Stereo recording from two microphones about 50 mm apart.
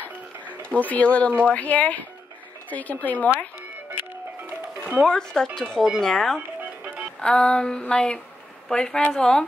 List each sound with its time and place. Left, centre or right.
0.0 s music: left
0.7 s speech: left
5.0 s speech: centre